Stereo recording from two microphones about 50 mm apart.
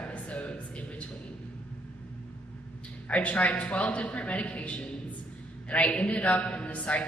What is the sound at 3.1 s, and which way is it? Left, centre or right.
A man's voice, left.